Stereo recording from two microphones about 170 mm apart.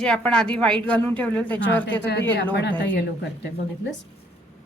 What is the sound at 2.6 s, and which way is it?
Speech, 90° left.